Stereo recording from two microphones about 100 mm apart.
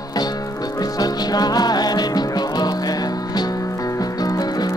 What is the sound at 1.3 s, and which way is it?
Music, 40° left (ahead or behind).